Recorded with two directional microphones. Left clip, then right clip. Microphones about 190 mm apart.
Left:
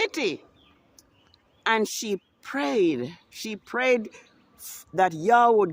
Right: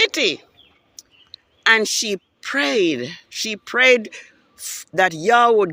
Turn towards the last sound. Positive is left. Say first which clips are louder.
# right 4 dB
turn(degrees=0)  # may be behind; listen again after turning